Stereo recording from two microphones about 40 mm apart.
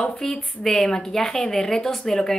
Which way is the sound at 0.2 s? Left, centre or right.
Centre.